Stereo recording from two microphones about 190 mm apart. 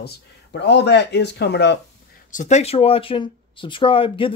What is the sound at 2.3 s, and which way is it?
Speech, 35° left (ahead or behind).